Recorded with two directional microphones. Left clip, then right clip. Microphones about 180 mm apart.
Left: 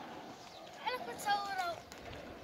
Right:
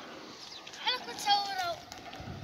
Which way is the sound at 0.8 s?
45° left (ahead or behind).